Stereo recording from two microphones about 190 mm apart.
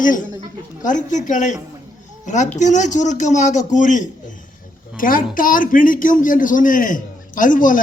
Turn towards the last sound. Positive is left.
turn(degrees=45)  # may be behind; listen again after turning